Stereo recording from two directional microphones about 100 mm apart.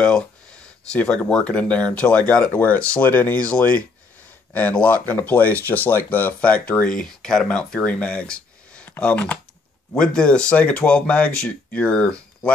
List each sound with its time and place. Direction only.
0.9 s speech: 10° left (ahead or behind)